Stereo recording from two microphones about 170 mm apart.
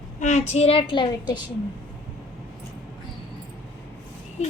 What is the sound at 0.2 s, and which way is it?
Speech, 45° left (ahead or behind).